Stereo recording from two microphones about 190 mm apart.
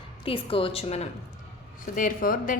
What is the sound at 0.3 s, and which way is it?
Speech, 30° left (ahead or behind).